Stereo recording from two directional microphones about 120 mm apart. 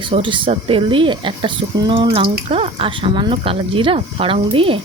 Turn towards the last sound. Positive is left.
turn(degrees=-50)  # may be behind; listen again after turning